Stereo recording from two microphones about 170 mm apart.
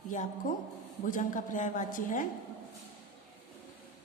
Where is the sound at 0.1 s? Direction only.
45° left (ahead or behind).